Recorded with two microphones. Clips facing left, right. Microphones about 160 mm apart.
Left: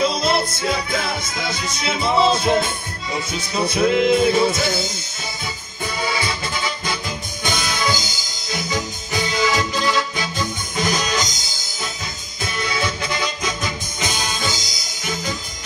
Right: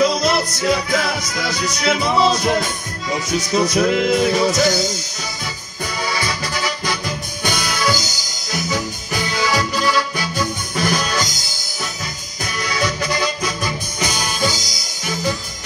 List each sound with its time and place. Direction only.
0.0 s music: 25° left (ahead or behind)
3.9 s music: 45° right (ahead or behind)
4.3 s music: 25° left (ahead or behind)
6.0 s accordion: 25° left (ahead or behind)
7.4 s music: 20° left (ahead or behind)
12.5 s music: 25° left (ahead or behind)